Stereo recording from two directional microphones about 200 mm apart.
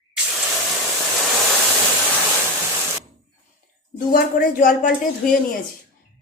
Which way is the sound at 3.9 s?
45° left (ahead or behind).